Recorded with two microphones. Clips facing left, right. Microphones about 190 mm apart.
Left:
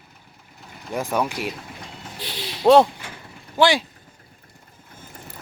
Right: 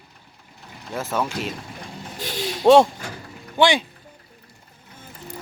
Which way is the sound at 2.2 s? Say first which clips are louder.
Right 6 dB; 45° right (ahead or behind).